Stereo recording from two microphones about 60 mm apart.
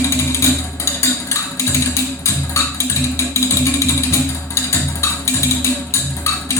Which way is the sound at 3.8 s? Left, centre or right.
Left.